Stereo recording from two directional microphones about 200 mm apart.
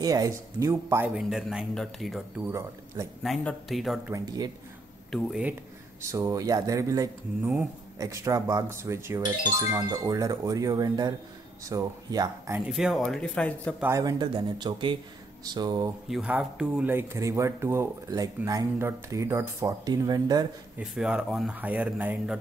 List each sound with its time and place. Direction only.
0.0 s speech: 20° right (ahead or behind); by 4.0 s centre (ahead or behind)
4.1 s speech: 20° right (ahead or behind)
5.1 s speech: 5° right (ahead or behind)
6.0 s speech: 15° right (ahead or behind)
12.5 s speech: centre (ahead or behind)
13.7 s speech: 15° right (ahead or behind)
16.1 s speech: 5° right (ahead or behind)
20.8 s speech: 5° right (ahead or behind)